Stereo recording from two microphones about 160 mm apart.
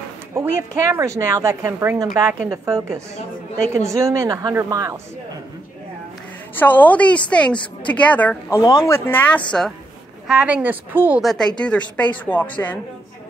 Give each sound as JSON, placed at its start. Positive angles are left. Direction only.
{"t": 0.3, "sound": "speech", "side_deg": -15}
{"t": 6.5, "sound": "a woman's voice", "side_deg": 10}
{"t": 11.2, "sound": "speech", "side_deg": 5}